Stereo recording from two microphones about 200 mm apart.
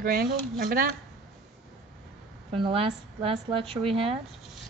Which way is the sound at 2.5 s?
25° right (ahead or behind).